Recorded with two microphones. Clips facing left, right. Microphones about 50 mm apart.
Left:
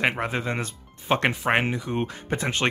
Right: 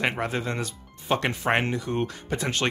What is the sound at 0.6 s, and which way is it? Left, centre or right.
Speech, left.